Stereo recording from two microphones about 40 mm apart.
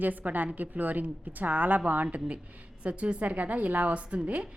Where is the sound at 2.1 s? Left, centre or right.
Right.